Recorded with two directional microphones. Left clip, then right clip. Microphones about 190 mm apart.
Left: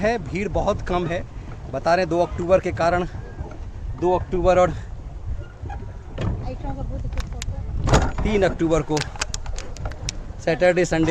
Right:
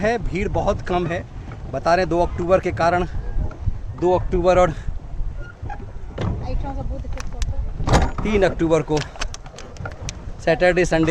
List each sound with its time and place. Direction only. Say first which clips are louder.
0.0 s speech: right 1 dB; 10° right (ahead or behind)
6.1 s boat: right 2 dB; 40° right (ahead or behind)
7.9 s speech: right 1 dB; 15° right (ahead or behind)
9.0 s keys jangling: even; 40° left (ahead or behind)
10.4 s speech: right 1 dB; 15° right (ahead or behind)